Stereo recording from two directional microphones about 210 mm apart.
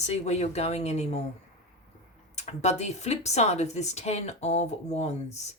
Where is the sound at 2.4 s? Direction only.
30° left (ahead or behind).